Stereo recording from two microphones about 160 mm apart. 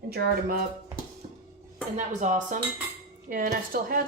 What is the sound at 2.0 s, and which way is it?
Speech, 50° right (ahead or behind).